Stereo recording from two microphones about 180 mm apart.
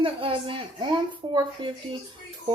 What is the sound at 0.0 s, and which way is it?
Speech, 30° right (ahead or behind).